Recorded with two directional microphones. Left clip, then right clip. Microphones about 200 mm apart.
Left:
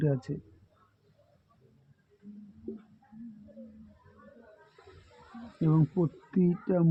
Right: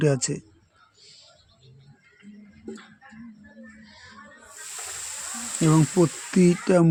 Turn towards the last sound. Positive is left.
turn(degrees=-35)  # may be behind; listen again after turning